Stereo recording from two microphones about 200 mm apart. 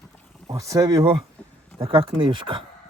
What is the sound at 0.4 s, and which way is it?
Speech, 15° right (ahead or behind).